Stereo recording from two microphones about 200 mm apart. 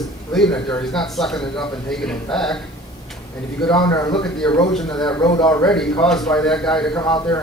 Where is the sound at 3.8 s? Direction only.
20° left (ahead or behind).